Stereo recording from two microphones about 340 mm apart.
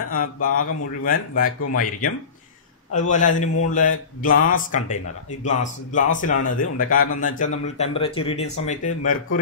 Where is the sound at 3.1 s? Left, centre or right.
Left.